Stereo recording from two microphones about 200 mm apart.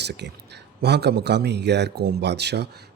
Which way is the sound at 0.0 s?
55° right (ahead or behind).